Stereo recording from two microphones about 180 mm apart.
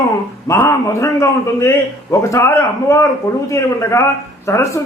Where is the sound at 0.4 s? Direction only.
15° left (ahead or behind).